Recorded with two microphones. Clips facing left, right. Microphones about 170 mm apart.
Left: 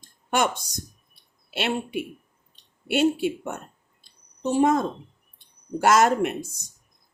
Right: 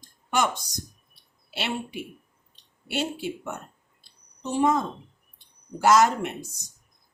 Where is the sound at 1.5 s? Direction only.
55° left (ahead or behind).